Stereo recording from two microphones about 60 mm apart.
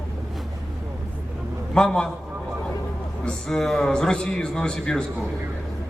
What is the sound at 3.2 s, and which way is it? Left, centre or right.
A man's voice, centre.